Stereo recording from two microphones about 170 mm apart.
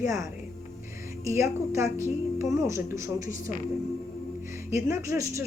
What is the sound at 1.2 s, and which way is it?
A woman's voice, 15° right (ahead or behind).